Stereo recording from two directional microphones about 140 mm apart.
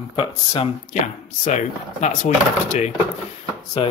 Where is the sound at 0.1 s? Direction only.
40° left (ahead or behind).